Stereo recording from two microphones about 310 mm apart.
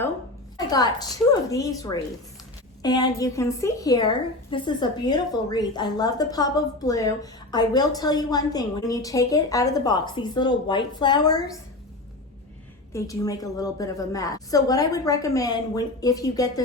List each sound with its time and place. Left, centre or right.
0.5 s a woman's voice: centre
12.9 s a woman's voice: centre